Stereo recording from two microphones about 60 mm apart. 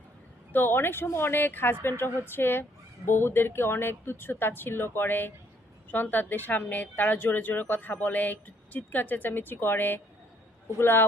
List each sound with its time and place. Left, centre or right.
0.5 s speech: left